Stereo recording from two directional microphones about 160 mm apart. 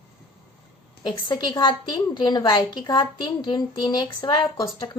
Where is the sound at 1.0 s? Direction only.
30° left (ahead or behind).